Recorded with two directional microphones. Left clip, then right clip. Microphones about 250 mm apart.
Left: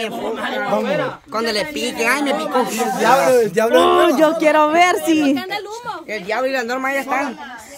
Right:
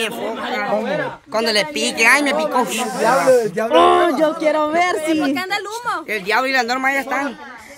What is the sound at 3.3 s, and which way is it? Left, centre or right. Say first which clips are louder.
Speech: left 1 dB; left.